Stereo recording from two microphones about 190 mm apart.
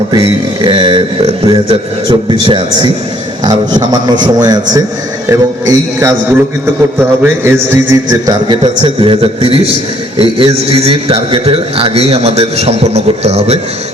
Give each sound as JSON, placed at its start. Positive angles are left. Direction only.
{"t": 0.1, "sound": "a man's voice", "side_deg": -25}
{"t": 7.2, "sound": "a man's voice", "side_deg": -10}